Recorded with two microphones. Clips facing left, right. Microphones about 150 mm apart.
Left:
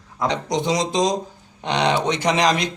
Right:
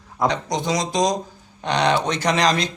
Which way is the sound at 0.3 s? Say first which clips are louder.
Left 2 dB; 25° left (ahead or behind).